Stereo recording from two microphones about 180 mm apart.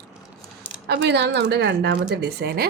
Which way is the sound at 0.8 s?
65° right (ahead or behind).